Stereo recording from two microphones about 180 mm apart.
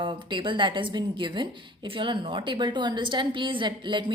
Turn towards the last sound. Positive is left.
turn(degrees=-25)  # may be behind; listen again after turning